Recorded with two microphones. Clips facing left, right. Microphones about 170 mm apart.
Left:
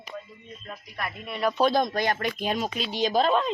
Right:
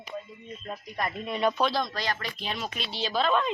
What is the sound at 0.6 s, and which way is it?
Speech, 30° right (ahead or behind).